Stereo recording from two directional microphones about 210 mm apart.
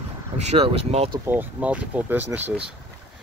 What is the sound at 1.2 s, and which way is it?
Speech, 10° right (ahead or behind).